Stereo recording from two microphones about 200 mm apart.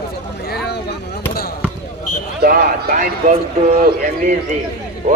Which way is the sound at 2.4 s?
50° right (ahead or behind).